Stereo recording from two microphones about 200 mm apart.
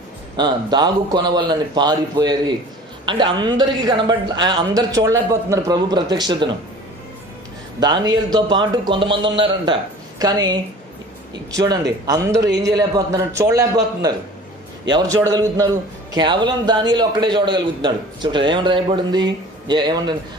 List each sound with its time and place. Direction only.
0.4 s a woman's voice: 20° right (ahead or behind)
7.8 s a woman's voice: 20° right (ahead or behind)
15.1 s a woman's voice: 20° right (ahead or behind)